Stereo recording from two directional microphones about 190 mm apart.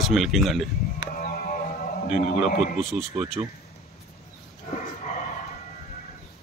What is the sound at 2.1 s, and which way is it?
Speech, 40° left (ahead or behind).